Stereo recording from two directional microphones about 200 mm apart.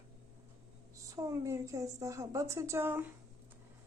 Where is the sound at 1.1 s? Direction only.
15° right (ahead or behind).